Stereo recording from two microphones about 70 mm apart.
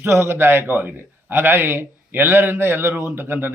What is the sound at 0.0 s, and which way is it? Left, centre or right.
A man's voice, right.